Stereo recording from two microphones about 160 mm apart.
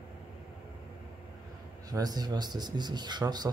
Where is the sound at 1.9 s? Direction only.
25° right (ahead or behind).